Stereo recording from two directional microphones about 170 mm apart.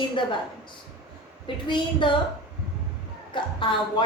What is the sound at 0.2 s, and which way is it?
Speech, 30° left (ahead or behind).